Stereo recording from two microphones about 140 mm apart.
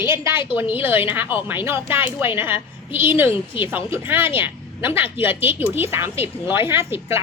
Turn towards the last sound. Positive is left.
turn(degrees=-20)  # may be behind; listen again after turning